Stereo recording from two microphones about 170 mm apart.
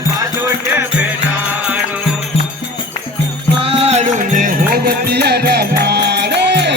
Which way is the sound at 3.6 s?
35° right (ahead or behind).